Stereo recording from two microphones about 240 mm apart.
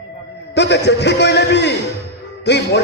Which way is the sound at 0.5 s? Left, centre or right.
Left.